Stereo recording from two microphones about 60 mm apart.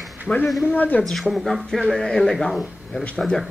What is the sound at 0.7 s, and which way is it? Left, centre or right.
Speech, left.